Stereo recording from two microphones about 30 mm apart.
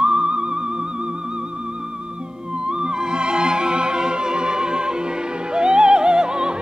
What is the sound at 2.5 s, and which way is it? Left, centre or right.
Music, right.